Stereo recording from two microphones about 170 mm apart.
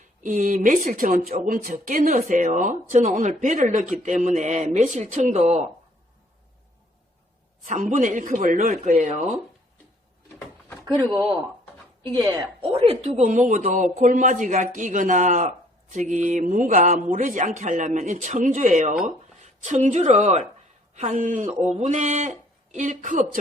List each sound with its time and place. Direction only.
0.2 s a man's voice: 50° right (ahead or behind)
7.7 s a man's voice: 45° right (ahead or behind)
12.7 s a man's voice: 35° right (ahead or behind)
21.6 s mantra: 40° right (ahead or behind)
22.7 s a man's voice: 45° right (ahead or behind)